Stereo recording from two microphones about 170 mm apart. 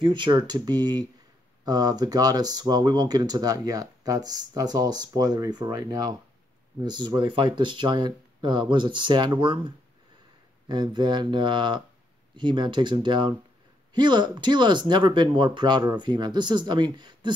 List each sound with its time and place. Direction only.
0.0 s speech: 25° right (ahead or behind)
10.7 s speech: 25° right (ahead or behind)